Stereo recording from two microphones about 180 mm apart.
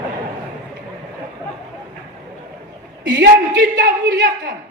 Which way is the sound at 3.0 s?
75° right (ahead or behind).